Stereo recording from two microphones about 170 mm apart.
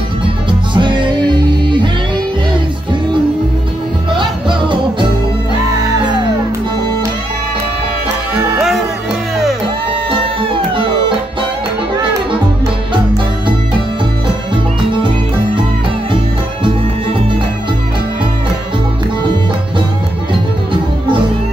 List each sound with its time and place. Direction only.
0.5 s music: 30° right (ahead or behind)
4.2 s music: 30° right (ahead or behind)